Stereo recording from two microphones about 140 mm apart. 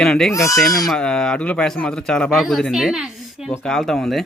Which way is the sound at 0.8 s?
5° left (ahead or behind).